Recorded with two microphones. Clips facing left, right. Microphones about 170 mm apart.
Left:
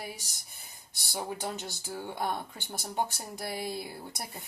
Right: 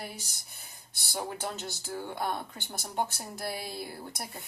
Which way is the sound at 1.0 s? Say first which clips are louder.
Even; 15° left (ahead or behind).